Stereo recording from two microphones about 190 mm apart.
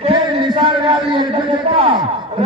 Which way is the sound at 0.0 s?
30° right (ahead or behind).